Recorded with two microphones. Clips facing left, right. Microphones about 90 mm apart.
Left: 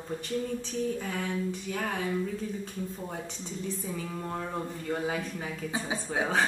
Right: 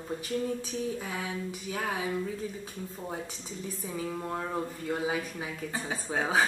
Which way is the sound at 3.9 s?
5° right (ahead or behind).